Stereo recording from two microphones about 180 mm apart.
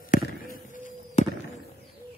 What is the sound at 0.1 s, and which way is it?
Basketball bounce, 50° left (ahead or behind).